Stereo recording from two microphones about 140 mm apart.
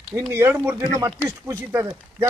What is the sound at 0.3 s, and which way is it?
Speech, 20° right (ahead or behind).